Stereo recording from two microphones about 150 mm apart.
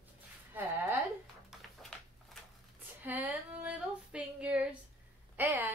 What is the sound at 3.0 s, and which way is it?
Female singing, 10° right (ahead or behind).